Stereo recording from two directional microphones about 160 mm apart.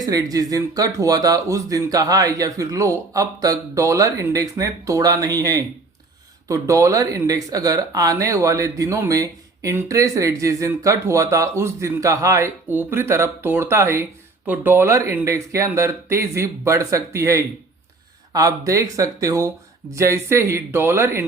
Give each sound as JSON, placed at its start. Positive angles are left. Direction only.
{"t": 0.0, "sound": "speech", "side_deg": -25}